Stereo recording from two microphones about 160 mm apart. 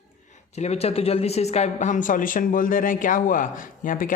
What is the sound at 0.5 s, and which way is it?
A woman's voice, 40° left (ahead or behind).